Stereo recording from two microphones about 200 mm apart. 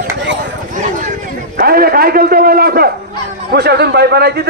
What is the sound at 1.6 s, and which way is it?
A man's voice, 50° right (ahead or behind).